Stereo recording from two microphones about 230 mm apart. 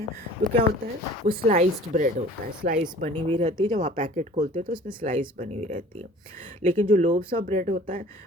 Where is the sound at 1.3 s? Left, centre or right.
Right.